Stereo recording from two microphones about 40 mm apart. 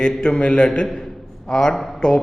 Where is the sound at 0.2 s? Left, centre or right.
Left.